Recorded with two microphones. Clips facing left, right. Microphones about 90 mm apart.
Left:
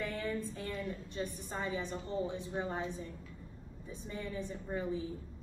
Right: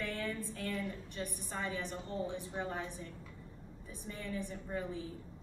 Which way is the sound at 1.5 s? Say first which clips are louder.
Left 1 dB; 20° left (ahead or behind).